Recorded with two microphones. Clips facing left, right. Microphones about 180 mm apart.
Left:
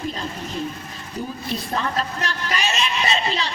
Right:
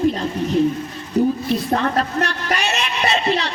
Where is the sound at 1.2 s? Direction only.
65° right (ahead or behind).